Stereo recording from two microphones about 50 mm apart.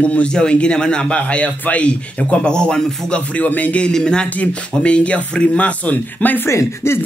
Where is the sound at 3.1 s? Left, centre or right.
Left.